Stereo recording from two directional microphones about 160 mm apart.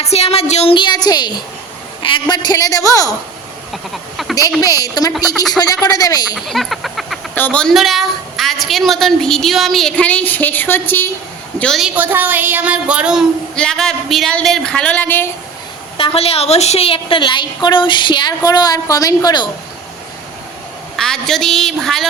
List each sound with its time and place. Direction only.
0.0 s a woman's voice: 40° left (ahead or behind); by 1.3 s 25° left (ahead or behind)
2.0 s a sound: 30° left (ahead or behind)
2.3 s a woman's voice: 25° left (ahead or behind)
4.2 s a woman's voice: centre (ahead or behind)
4.6 s a woman's voice: 25° left (ahead or behind)
5.1 s a woman's voice: centre (ahead or behind)
5.8 s a woman's voice: 25° left (ahead or behind)
6.3 s a sound: centre (ahead or behind)
7.3 s a woman's voice: 10° left (ahead or behind)
11.6 s a woman's voice: centre (ahead or behind)
11.9 s a woman's voice: 10° right (ahead or behind); by 15.3 s 15° left (ahead or behind)
16.0 s a woman's voice: 35° left (ahead or behind)
20.9 s a woman's voice: 5° left (ahead or behind)